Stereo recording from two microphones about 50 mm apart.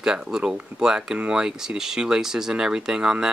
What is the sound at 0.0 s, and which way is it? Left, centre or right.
Speech, centre.